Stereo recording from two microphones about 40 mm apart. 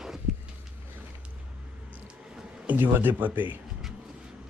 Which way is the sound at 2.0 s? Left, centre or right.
Right.